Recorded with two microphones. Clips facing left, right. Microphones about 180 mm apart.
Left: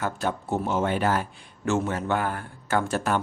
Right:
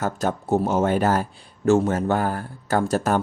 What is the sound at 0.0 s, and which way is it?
Speech, 40° right (ahead or behind).